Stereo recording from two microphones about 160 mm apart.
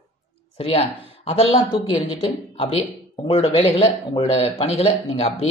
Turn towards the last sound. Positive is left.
turn(degrees=40)  # may be behind; listen again after turning